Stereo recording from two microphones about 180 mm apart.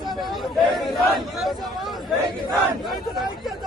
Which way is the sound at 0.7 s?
Centre (ahead or behind).